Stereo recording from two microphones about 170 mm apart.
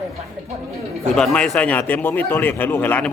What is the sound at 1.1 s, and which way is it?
A man's voice, 5° left (ahead or behind).